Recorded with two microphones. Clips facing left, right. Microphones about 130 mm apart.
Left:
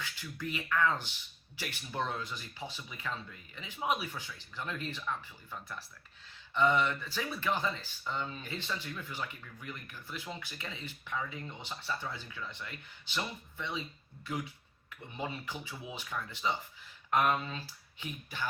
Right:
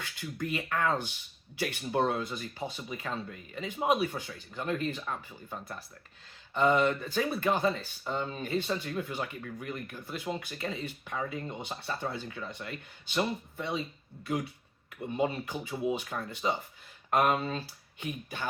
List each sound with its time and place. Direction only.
0.0 s speech: 55° right (ahead or behind)
15.1 s speech: 50° right (ahead or behind)